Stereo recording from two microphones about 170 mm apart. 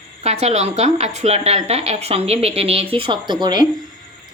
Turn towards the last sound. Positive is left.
turn(degrees=-25)  # may be behind; listen again after turning